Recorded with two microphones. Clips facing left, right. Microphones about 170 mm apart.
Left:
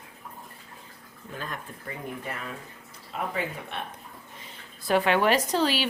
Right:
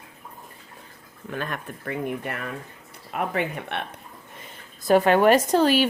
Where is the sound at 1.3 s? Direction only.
70° right (ahead or behind).